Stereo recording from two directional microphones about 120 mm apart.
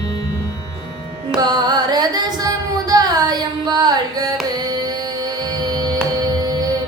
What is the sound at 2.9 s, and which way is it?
Carnatic music, 30° right (ahead or behind).